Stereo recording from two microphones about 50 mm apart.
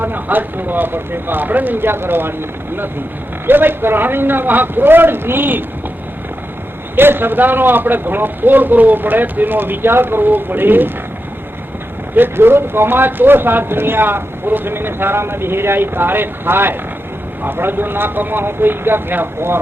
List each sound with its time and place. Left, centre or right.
0.0 s speech: right
3.4 s speech: right
6.9 s speech: right
12.1 s speech: right